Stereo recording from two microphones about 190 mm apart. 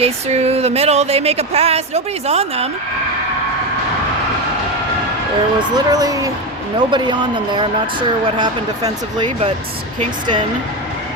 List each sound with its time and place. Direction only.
0.0 s speech: 35° right (ahead or behind)
5.5 s speech: 20° right (ahead or behind)